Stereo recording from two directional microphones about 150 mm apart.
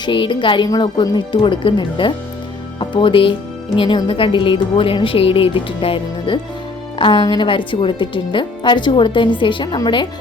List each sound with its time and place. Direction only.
0.0 s speech: 35° left (ahead or behind)